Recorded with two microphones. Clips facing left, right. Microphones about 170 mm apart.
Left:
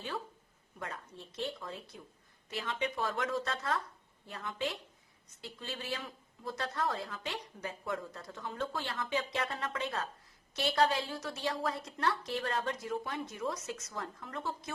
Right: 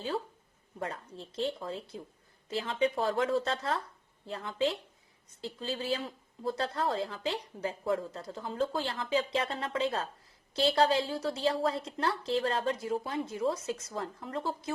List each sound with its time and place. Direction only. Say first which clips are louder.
0.8 s speech: right 5 dB; 30° right (ahead or behind)